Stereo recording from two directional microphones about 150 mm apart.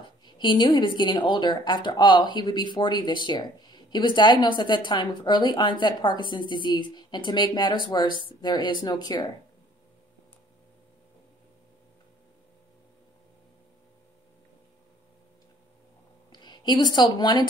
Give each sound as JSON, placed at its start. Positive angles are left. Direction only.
{"t": 0.2, "sound": "a woman's voice", "side_deg": 30}
{"t": 16.3, "sound": "a woman's voice", "side_deg": 30}